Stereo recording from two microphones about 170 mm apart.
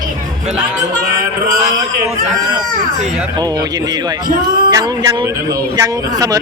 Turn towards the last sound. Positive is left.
turn(degrees=-20)  # may be behind; listen again after turning